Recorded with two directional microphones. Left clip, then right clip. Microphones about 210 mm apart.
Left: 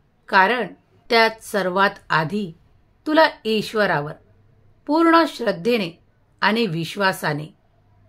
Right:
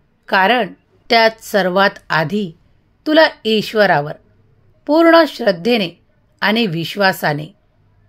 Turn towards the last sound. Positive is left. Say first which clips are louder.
# right 6 dB
turn(degrees=-25)  # may be behind; listen again after turning